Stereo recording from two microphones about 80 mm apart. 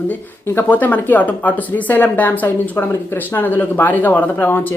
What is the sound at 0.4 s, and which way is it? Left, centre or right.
Speech, left.